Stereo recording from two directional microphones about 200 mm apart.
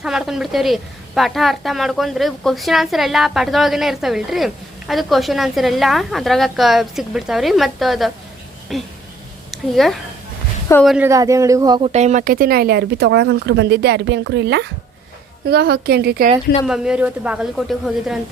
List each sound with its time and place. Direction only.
0.0 s a woman's voice: 5° right (ahead or behind); by 11.9 s 20° right (ahead or behind)
11.9 s a woman's voice: 35° right (ahead or behind); by 16.3 s 50° right (ahead or behind)
16.6 s a woman's voice: 5° right (ahead or behind)